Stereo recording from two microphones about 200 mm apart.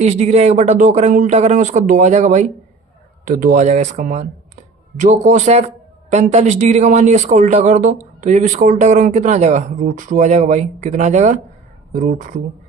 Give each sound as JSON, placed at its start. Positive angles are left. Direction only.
{"t": 0.0, "sound": "a woman's voice", "side_deg": -35}